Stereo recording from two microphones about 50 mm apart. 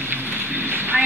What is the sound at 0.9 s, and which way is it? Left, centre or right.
Speech, right.